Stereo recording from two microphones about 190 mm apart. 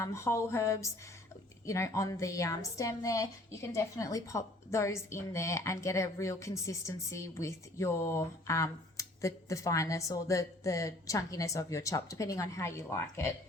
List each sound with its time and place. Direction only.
0.0 s a woman's voice: 15° left (ahead or behind)